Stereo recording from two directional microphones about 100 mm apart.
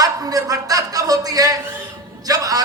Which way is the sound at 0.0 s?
35° right (ahead or behind).